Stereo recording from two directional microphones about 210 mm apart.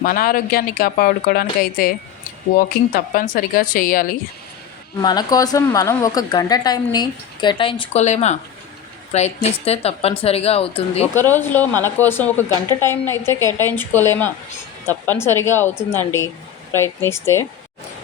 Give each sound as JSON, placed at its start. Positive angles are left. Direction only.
{"t": 0.0, "sound": "a woman's voice", "side_deg": 45}
{"t": 5.0, "sound": "a woman's voice", "side_deg": 20}
{"t": 11.1, "sound": "a woman's voice", "side_deg": 10}